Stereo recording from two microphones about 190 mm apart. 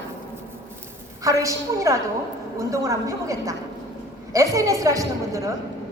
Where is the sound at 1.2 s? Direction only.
15° right (ahead or behind).